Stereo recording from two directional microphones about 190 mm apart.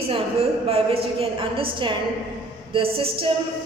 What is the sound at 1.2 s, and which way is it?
A woman's voice, 30° right (ahead or behind).